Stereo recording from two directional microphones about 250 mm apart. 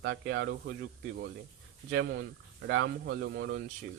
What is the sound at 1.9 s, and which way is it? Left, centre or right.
Speech, right.